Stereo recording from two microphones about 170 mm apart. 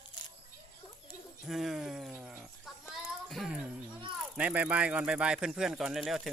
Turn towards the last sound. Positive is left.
turn(degrees=0)  # may be behind; listen again after turning